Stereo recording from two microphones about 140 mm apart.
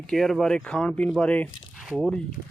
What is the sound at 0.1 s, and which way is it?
Speech, centre (ahead or behind).